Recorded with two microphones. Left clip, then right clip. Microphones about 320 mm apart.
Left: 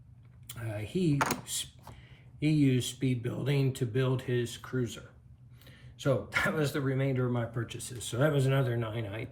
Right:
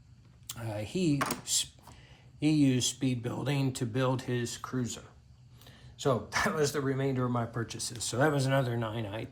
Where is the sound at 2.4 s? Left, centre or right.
Centre.